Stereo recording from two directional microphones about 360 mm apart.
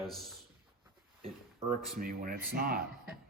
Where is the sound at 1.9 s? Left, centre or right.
Right.